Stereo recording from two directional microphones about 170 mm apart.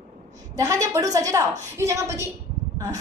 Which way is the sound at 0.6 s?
20° right (ahead or behind).